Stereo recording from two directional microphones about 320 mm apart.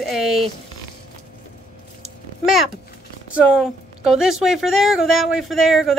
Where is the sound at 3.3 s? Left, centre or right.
Centre.